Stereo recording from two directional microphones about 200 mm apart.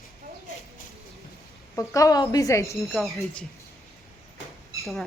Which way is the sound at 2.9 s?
Centre (ahead or behind).